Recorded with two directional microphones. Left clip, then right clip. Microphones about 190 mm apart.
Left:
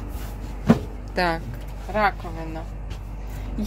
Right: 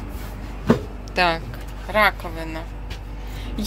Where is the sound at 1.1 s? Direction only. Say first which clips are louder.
Right 4 dB; 20° left (ahead or behind).